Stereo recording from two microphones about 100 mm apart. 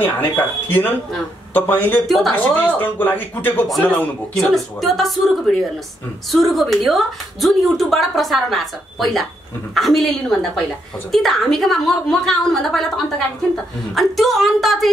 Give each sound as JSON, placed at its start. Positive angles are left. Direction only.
{"t": 0.0, "sound": "speech", "side_deg": 20}
{"t": 2.0, "sound": "a woman's voice", "side_deg": 0}
{"t": 2.3, "sound": "speech", "side_deg": 15}
{"t": 4.4, "sound": "a woman's voice", "side_deg": 0}